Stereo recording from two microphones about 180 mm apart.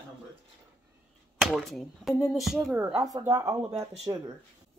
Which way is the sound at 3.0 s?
20° right (ahead or behind).